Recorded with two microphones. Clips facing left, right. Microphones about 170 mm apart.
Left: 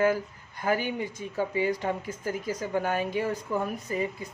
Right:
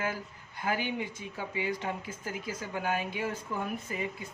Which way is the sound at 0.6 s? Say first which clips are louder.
Left 4 dB; 40° left (ahead or behind).